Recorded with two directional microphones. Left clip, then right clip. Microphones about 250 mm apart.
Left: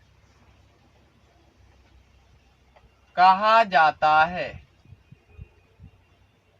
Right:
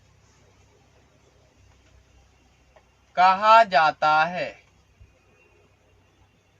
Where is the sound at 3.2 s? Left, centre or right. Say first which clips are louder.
Right 1 dB; centre.